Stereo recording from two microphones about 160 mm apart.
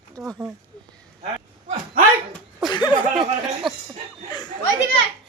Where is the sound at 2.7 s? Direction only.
30° left (ahead or behind).